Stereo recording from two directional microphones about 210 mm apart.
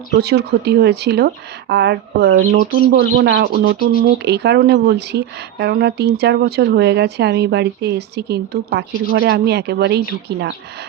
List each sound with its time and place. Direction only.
0.1 s speech: 50° right (ahead or behind)
2.3 s speech: 40° right (ahead or behind)
3.2 s speech: 55° right (ahead or behind)